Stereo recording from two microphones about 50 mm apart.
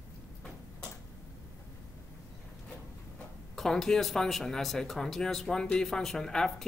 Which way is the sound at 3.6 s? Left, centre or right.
Centre.